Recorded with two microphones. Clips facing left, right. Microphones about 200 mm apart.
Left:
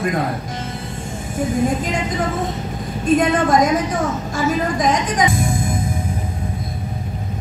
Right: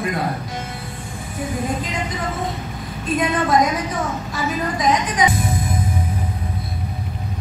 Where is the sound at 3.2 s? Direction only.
45° left (ahead or behind).